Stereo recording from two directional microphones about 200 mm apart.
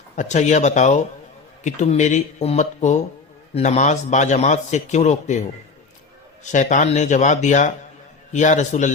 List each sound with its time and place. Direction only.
0.2 s a man's voice: 35° left (ahead or behind)
6.5 s a man's voice: 40° left (ahead or behind)